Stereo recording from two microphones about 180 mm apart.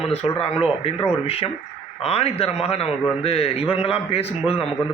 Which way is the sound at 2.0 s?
35° left (ahead or behind).